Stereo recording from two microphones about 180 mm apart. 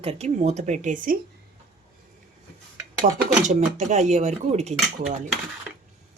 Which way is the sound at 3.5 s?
40° right (ahead or behind).